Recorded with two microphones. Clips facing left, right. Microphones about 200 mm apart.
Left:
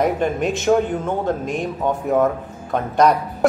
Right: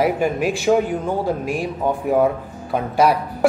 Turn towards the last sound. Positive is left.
turn(degrees=-5)  # may be behind; listen again after turning